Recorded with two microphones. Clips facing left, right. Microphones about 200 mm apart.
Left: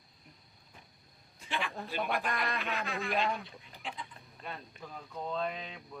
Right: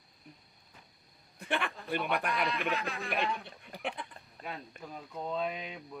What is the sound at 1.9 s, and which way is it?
Speech, 55° right (ahead or behind).